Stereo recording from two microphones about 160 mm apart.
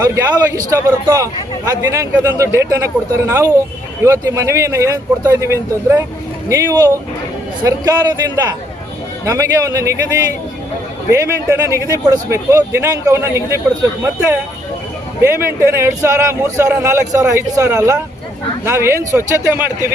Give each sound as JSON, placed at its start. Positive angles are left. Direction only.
{"t": 0.0, "sound": "a man's voice", "side_deg": -20}
{"t": 9.2, "sound": "a man's voice", "side_deg": -20}
{"t": 11.1, "sound": "speech", "side_deg": -20}